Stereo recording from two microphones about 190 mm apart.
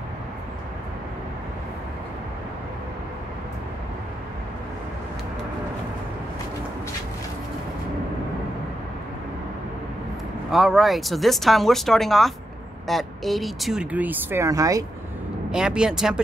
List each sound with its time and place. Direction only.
10.5 s speech: centre (ahead or behind); by 14.9 s 15° right (ahead or behind)
15.5 s speech: 5° right (ahead or behind)